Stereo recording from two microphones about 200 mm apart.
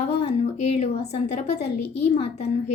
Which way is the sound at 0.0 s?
30° left (ahead or behind).